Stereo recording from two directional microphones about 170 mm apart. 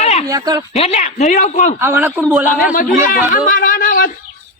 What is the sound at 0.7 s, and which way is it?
Speech, 40° left (ahead or behind).